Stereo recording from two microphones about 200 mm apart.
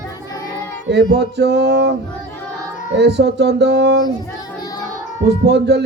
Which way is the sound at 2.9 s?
60° right (ahead or behind).